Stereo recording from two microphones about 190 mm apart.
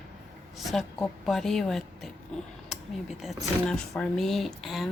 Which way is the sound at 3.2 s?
Centre (ahead or behind).